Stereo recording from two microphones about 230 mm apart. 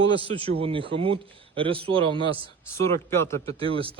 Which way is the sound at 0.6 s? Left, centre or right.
Right.